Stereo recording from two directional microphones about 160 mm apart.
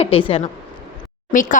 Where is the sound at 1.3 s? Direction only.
55° left (ahead or behind).